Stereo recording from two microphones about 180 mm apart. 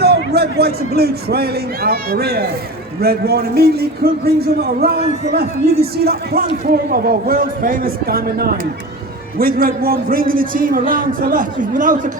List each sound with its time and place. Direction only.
0.0 s a man's voice: 65° right (ahead or behind); by 12.1 s 45° right (ahead or behind)